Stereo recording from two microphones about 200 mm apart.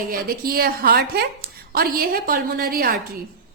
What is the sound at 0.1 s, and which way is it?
A woman's voice, 45° right (ahead or behind).